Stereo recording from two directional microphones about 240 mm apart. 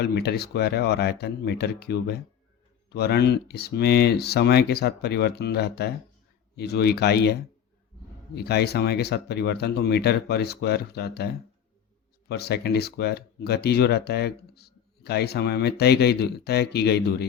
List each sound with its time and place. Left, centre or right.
0.0 s speech: left
8.4 s speech: left
12.3 s speech: left